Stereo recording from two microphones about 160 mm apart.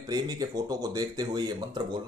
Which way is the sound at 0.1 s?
25° right (ahead or behind).